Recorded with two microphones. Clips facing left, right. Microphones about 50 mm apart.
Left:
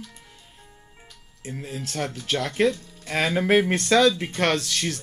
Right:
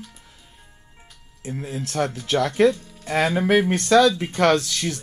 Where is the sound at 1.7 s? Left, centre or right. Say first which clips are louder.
Right 2 dB; right.